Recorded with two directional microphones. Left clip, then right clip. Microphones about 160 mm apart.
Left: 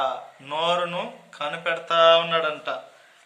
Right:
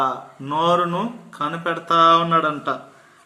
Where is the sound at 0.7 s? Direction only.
35° left (ahead or behind).